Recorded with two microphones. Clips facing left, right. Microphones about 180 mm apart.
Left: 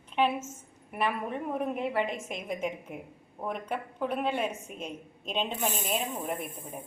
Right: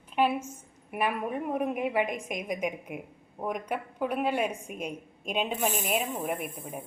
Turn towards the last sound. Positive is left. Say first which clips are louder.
# right 2 dB
turn(degrees=-10)  # may be behind; listen again after turning